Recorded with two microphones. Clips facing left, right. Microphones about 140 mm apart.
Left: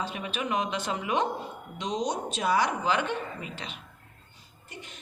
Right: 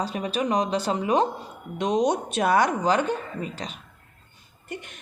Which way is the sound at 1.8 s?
55° right (ahead or behind).